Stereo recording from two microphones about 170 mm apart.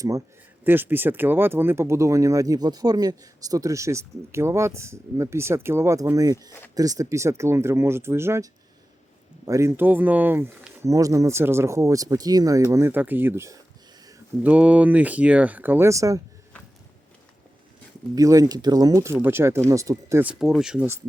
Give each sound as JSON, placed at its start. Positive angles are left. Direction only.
{"t": 0.6, "sound": "speech", "side_deg": -10}
{"t": 9.5, "sound": "speech", "side_deg": -15}
{"t": 18.1, "sound": "speech", "side_deg": -20}